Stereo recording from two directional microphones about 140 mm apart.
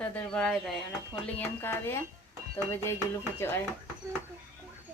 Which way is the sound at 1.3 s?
15° left (ahead or behind).